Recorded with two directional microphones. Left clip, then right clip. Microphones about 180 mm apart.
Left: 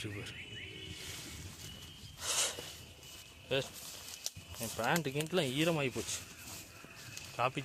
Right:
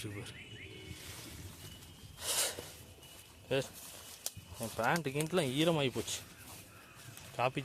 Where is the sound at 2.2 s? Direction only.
30° right (ahead or behind).